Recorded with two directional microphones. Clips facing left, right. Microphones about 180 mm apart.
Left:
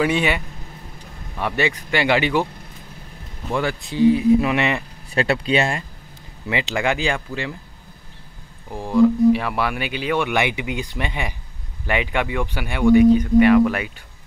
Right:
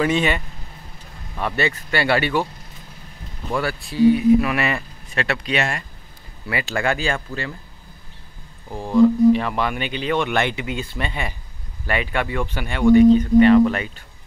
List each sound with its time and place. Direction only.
0.0 s speech: 10° left (ahead or behind)
1.4 s speech: 15° left (ahead or behind)
3.5 s speech: 20° left (ahead or behind)
8.6 s speech: 10° left (ahead or behind)